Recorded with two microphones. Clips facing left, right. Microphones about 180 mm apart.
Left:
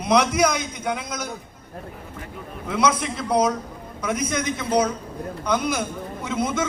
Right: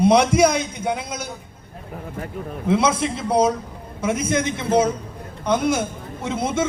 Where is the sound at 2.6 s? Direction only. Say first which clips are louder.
Right 3 dB; 30° right (ahead or behind).